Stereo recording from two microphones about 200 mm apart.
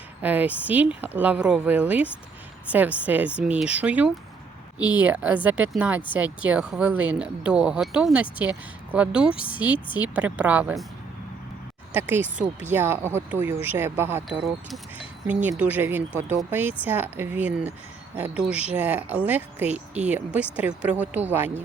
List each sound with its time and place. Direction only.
0.2 s speech: 10° right (ahead or behind)
11.9 s speech: 10° right (ahead or behind)
19.7 s speech: 35° right (ahead or behind)
20.1 s speech: 5° right (ahead or behind)